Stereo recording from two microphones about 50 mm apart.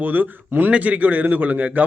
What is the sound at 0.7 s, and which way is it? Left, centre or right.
A man's voice, right.